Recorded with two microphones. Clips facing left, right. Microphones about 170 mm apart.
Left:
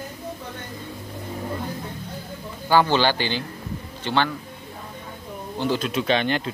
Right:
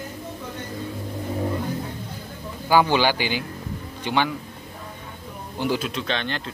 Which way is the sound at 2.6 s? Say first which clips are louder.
Even; 10° right (ahead or behind).